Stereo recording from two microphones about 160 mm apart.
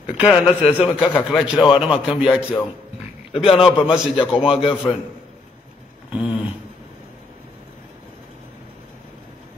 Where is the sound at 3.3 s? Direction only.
35° left (ahead or behind).